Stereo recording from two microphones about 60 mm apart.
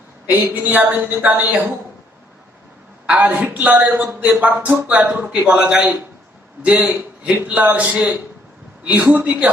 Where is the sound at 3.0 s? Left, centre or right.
Right.